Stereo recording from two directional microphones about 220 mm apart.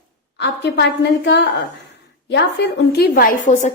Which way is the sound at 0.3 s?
50° left (ahead or behind).